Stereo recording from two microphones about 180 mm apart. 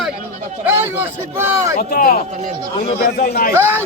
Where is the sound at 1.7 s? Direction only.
55° left (ahead or behind).